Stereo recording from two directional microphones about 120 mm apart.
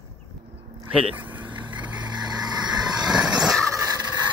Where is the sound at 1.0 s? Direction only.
45° right (ahead or behind).